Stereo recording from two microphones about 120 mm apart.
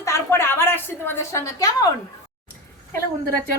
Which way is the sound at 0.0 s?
25° left (ahead or behind).